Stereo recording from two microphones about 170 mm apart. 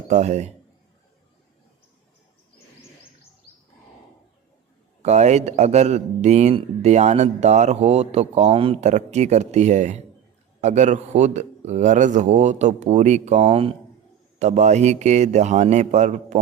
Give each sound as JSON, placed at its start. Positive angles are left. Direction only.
{"t": 0.1, "sound": "a man's voice", "side_deg": -40}
{"t": 5.0, "sound": "a man's voice", "side_deg": -40}